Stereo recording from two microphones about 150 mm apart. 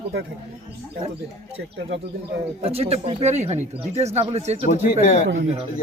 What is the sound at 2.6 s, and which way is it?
Speech, 40° right (ahead or behind).